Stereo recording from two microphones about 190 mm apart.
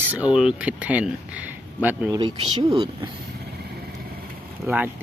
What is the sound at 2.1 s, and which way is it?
Speech, 25° right (ahead or behind).